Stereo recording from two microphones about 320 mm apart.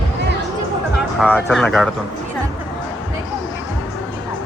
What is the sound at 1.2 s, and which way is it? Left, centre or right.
Speech, centre.